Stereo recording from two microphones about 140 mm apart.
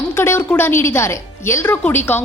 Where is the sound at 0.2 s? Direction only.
15° left (ahead or behind).